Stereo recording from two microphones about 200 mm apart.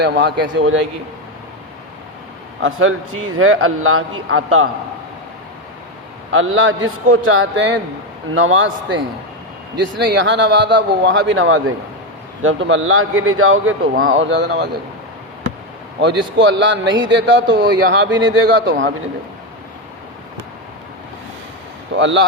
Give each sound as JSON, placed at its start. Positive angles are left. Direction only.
{"t": 0.0, "sound": "a man's voice", "side_deg": -60}
{"t": 2.6, "sound": "a man's voice", "side_deg": -90}
{"t": 6.3, "sound": "a man's voice", "side_deg": -75}
{"t": 8.3, "sound": "a man's voice", "side_deg": -80}
{"t": 9.8, "sound": "a man's voice", "side_deg": -60}
{"t": 14.0, "sound": "a man's voice", "side_deg": -75}
{"t": 16.0, "sound": "a man's voice", "side_deg": -60}
{"t": 21.9, "sound": "a man's voice", "side_deg": -65}